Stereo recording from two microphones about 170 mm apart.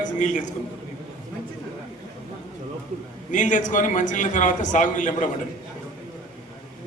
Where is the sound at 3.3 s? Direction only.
50° left (ahead or behind).